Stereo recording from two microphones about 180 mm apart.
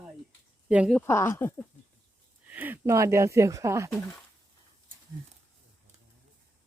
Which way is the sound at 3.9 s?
5° left (ahead or behind).